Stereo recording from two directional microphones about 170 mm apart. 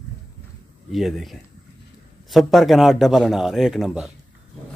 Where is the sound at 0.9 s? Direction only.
Centre (ahead or behind).